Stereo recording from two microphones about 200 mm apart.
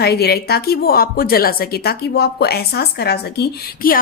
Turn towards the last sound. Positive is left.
turn(degrees=50)  # may be behind; listen again after turning